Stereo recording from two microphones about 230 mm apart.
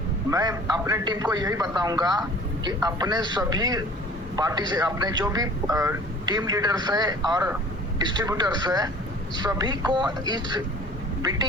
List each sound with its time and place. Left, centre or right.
0.3 s speech: centre